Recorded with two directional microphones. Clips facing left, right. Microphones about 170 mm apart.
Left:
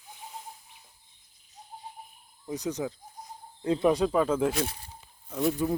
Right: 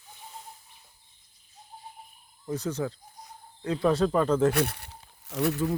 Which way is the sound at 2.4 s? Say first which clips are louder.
Right 1 dB; 15° left (ahead or behind).